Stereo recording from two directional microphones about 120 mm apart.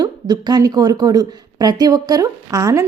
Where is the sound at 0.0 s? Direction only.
35° right (ahead or behind).